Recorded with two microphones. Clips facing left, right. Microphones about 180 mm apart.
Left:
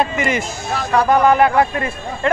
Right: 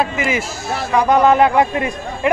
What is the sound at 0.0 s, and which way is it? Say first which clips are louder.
Speech: even; centre (ahead or behind).